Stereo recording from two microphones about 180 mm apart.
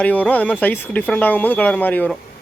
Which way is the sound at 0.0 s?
10° left (ahead or behind).